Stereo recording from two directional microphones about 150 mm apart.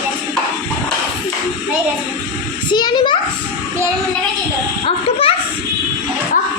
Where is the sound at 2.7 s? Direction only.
30° left (ahead or behind).